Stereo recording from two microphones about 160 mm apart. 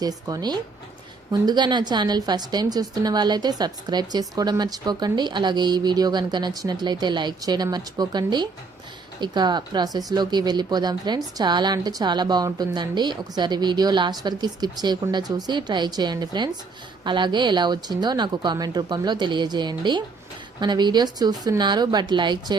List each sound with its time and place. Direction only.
0.0 s a woman's voice: 25° right (ahead or behind)